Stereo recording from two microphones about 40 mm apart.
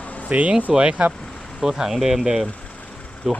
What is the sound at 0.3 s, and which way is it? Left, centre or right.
Speech, right.